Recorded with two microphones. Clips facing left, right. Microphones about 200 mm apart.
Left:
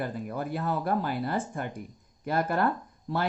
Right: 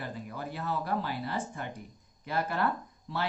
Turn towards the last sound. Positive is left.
turn(degrees=50)  # may be behind; listen again after turning